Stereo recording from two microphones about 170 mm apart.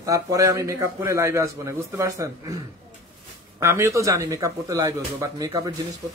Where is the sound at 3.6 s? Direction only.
15° right (ahead or behind).